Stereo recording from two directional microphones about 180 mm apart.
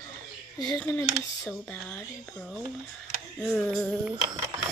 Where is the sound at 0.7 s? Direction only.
10° left (ahead or behind).